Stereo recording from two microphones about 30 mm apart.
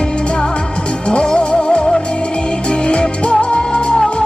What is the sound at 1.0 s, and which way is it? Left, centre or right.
Music, left.